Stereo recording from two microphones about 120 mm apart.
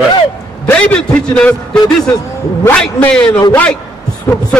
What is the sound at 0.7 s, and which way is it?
A man's voice, 10° left (ahead or behind).